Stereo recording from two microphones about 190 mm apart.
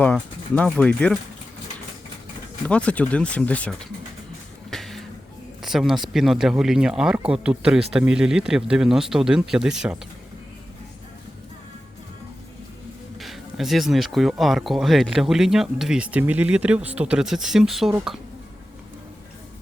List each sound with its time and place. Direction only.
0.0 s speech: 5° left (ahead or behind)
2.6 s speech: 5° left (ahead or behind)
4.7 s music: centre (ahead or behind)
5.6 s speech: centre (ahead or behind)
13.1 s speech: centre (ahead or behind)